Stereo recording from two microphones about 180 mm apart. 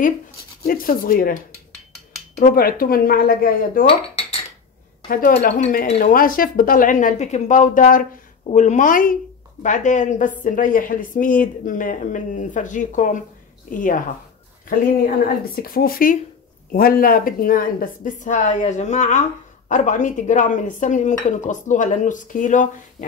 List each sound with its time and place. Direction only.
0.7 s speech: 55° left (ahead or behind)
3.8 s cutlery: 30° left (ahead or behind)
5.0 s speech: 55° left (ahead or behind)